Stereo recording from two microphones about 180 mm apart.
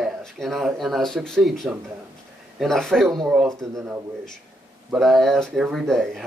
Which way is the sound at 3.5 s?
20° right (ahead or behind).